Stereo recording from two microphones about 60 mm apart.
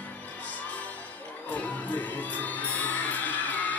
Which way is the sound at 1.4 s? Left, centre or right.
Left.